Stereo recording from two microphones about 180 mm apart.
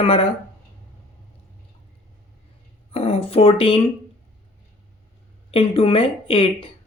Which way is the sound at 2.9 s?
30° left (ahead or behind).